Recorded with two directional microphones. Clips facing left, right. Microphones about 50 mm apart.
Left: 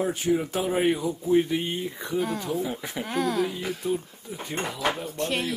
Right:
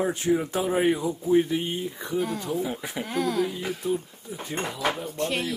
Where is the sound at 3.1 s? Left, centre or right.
Left.